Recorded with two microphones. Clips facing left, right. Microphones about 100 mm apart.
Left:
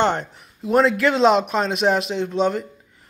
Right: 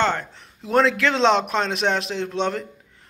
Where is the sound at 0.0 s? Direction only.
20° left (ahead or behind).